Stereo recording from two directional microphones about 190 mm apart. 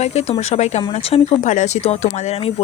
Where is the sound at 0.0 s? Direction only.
35° left (ahead or behind).